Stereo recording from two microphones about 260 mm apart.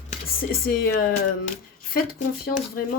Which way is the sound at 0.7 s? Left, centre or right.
Left.